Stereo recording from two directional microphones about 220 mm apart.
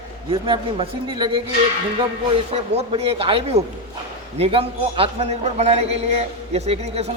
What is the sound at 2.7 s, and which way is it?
A man's voice, 25° right (ahead or behind).